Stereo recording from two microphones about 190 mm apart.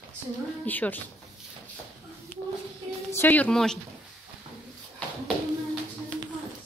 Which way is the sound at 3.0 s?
10° left (ahead or behind).